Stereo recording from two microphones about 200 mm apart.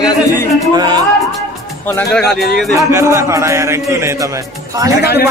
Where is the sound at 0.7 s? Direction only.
20° right (ahead or behind).